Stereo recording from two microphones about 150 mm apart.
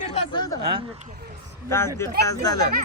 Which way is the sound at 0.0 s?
50° left (ahead or behind).